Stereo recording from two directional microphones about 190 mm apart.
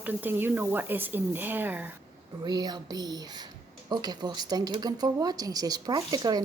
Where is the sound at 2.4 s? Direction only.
20° right (ahead or behind).